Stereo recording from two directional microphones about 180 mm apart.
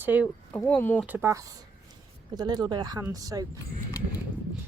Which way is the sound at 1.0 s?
10° right (ahead or behind).